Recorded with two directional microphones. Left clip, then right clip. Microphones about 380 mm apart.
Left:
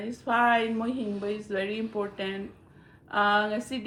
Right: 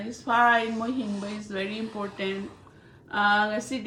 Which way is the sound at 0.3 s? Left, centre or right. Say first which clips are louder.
Right 2 dB; centre.